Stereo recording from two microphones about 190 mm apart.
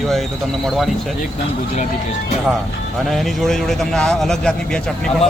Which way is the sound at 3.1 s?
Centre (ahead or behind).